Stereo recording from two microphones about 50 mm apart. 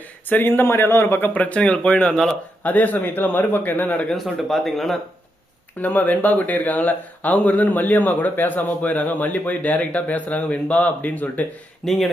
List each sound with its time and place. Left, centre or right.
0.3 s a man's voice: left
1.3 s speech: left
2.6 s speech: left
4.1 s speech: centre
5.8 s speech: left
11.8 s speech: centre